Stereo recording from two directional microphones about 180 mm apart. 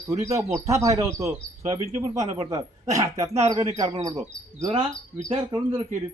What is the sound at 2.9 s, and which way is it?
Speech, 20° right (ahead or behind).